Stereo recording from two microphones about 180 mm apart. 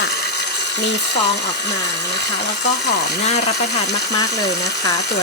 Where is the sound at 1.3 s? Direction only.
70° left (ahead or behind).